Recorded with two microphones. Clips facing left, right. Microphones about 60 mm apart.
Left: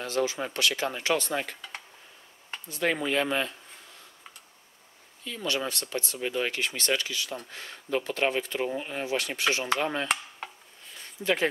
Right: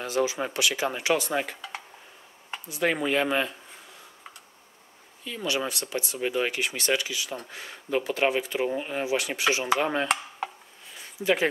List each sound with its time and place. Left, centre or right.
0.0 s speech: centre
5.2 s speech: centre
10.0 s a sound: centre